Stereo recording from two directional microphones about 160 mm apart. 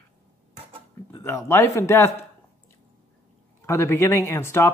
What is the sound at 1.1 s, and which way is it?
Speech, 20° left (ahead or behind).